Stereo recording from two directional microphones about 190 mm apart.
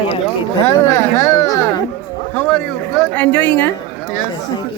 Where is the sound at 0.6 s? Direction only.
15° left (ahead or behind).